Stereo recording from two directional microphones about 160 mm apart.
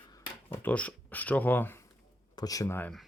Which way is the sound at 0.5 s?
10° left (ahead or behind).